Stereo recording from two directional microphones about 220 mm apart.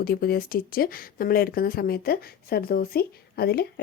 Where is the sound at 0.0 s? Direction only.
45° left (ahead or behind).